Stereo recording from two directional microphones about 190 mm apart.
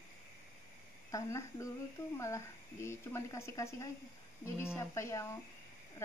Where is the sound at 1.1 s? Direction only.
15° left (ahead or behind).